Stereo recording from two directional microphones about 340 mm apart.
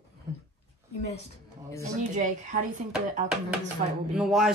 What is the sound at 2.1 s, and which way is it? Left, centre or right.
Speech, right.